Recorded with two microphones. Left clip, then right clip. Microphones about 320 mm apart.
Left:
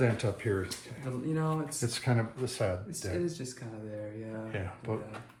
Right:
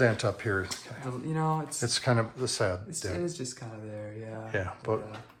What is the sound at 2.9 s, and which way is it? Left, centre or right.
Speech, right.